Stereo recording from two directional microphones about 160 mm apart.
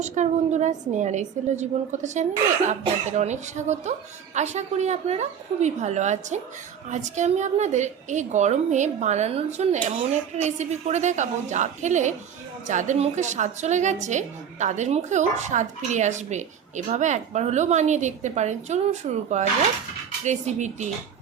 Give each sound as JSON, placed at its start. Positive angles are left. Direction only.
{"t": 0.0, "sound": "a woman's voice", "side_deg": -45}